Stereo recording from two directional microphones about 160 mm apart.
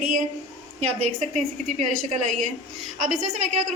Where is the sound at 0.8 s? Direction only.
45° right (ahead or behind).